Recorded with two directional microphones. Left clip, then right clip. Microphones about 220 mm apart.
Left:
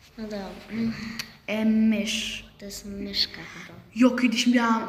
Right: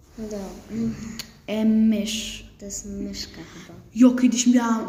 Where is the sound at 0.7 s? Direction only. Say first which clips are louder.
Right 1 dB; 10° right (ahead or behind).